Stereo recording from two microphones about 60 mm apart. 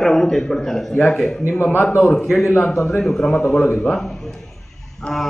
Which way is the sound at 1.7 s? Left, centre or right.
Left.